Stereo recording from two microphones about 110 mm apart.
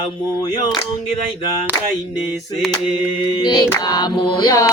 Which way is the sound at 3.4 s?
40° left (ahead or behind).